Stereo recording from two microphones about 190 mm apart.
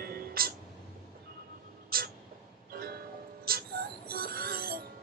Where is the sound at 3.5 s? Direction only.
50° right (ahead or behind).